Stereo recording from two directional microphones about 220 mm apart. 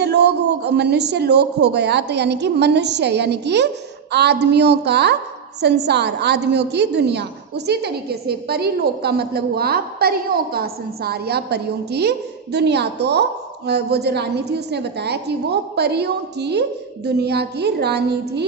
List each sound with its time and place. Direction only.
0.0 s a woman's voice: 50° right (ahead or behind)